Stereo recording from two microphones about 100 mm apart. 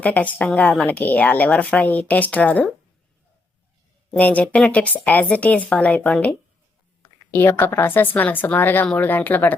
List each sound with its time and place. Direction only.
0.0 s speech: 15° left (ahead or behind)
4.1 s a woman's voice: 15° left (ahead or behind)